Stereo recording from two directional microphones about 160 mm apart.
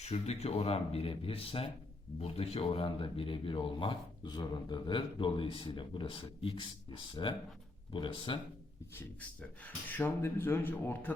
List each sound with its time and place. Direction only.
0.0 s speech: 40° left (ahead or behind)
9.0 s speech: 10° left (ahead or behind)